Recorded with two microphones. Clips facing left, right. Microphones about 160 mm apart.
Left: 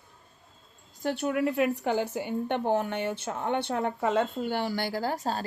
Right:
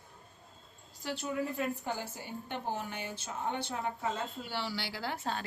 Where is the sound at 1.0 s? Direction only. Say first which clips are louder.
Left 8 dB; 60° left (ahead or behind).